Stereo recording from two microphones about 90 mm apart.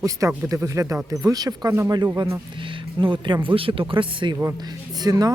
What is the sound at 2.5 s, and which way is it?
Speech, 65° right (ahead or behind).